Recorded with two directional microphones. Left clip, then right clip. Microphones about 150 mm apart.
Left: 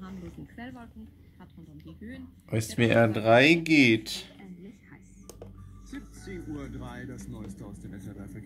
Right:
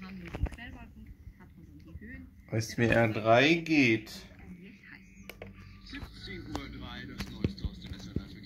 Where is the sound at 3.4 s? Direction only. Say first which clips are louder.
Left 4 dB; 55° left (ahead or behind).